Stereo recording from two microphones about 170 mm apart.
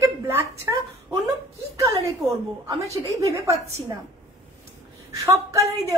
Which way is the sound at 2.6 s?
20° right (ahead or behind).